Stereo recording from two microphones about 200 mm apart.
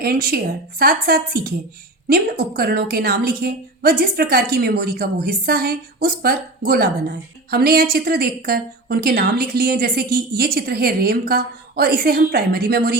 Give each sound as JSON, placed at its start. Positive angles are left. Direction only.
{"t": 0.0, "sound": "a woman's voice", "side_deg": -50}